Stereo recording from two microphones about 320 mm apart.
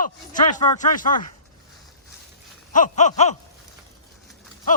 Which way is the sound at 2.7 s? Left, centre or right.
Left.